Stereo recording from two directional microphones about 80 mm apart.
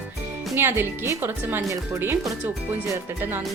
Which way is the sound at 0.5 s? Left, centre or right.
Right.